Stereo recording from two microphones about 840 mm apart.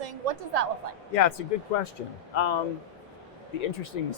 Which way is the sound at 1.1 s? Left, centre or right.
Left.